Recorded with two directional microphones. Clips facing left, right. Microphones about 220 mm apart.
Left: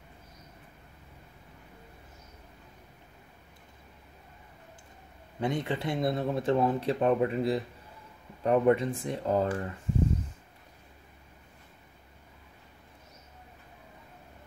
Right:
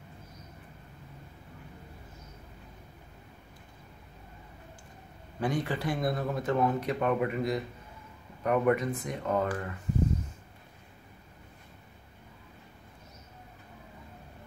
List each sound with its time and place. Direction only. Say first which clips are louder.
5.4 s speech: even; 25° left (ahead or behind)